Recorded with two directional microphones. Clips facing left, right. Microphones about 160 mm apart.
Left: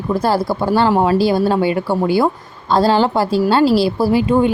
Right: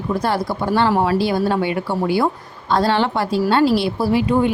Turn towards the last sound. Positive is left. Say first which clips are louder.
# left 3 dB
turn(degrees=25)  # may be behind; listen again after turning